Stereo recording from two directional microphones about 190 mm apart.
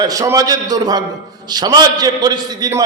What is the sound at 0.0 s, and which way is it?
A man's voice, 20° right (ahead or behind).